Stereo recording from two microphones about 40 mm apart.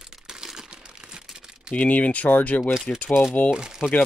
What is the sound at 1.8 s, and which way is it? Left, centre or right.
Speech, left.